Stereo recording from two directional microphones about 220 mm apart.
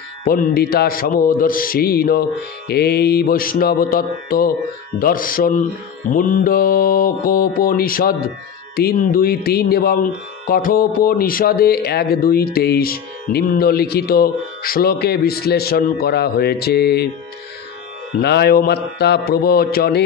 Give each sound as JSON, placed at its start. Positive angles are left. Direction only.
{"t": 0.2, "sound": "speech", "side_deg": 45}
{"t": 2.7, "sound": "mantra", "side_deg": 45}
{"t": 8.7, "sound": "speech", "side_deg": 45}
{"t": 18.2, "sound": "speech", "side_deg": 45}